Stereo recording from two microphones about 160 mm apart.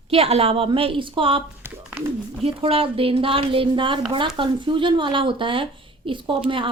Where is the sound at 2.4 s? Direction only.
35° right (ahead or behind).